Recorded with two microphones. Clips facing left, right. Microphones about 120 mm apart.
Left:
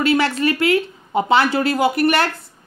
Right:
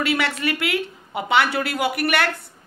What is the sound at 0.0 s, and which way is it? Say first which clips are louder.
Speech: left 6 dB; 30° left (ahead or behind).